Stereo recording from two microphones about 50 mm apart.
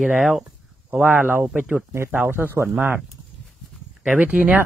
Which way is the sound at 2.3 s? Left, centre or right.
Right.